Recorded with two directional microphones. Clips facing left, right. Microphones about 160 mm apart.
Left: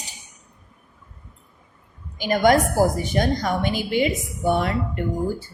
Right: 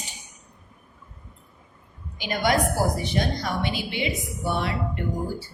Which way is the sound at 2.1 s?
45° left (ahead or behind).